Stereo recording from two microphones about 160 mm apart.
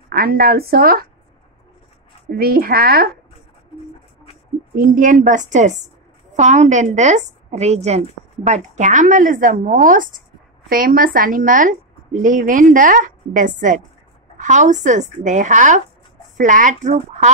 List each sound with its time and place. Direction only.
0.1 s speech: 70° right (ahead or behind)
2.3 s speech: 70° right (ahead or behind)
4.7 s a woman's voice: 55° right (ahead or behind)